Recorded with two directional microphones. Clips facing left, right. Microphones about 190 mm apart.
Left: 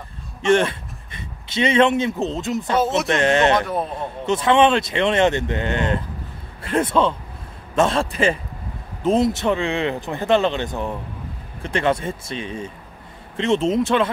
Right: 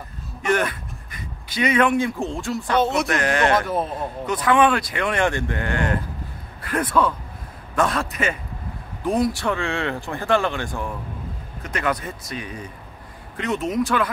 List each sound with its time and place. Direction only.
0.4 s speech: 25° left (ahead or behind)
3.6 s a man's voice: centre (ahead or behind)
4.3 s speech: 25° left (ahead or behind)